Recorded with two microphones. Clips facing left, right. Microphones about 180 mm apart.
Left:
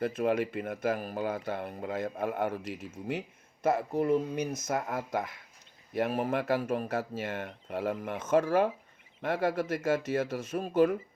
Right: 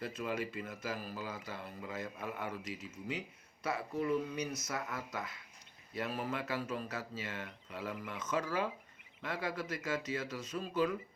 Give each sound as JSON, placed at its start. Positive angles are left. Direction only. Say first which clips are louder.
{"t": 0.0, "sound": "a man's voice", "louder": "left 10 dB", "side_deg": 55}